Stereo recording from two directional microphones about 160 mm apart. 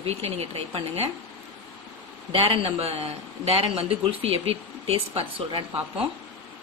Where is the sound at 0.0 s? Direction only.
40° right (ahead or behind).